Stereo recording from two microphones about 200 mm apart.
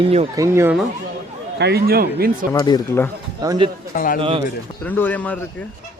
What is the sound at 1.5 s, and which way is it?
Speech, 55° right (ahead or behind).